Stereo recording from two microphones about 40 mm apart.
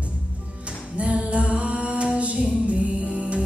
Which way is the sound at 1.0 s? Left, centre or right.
Right.